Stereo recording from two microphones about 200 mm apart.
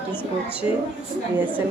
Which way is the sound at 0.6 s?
30° left (ahead or behind).